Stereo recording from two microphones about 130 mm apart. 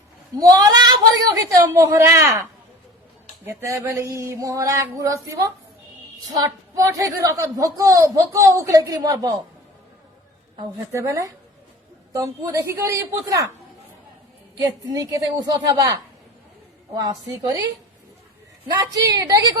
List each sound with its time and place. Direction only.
0.3 s a woman's voice: 30° right (ahead or behind)
10.9 s a woman's voice: 25° right (ahead or behind)
14.6 s a woman's voice: 25° right (ahead or behind)
18.7 s a woman's voice: 30° right (ahead or behind)